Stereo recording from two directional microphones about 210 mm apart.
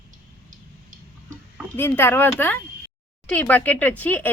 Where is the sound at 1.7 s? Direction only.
10° left (ahead or behind).